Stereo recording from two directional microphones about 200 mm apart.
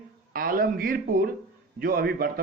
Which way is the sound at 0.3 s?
45° right (ahead or behind).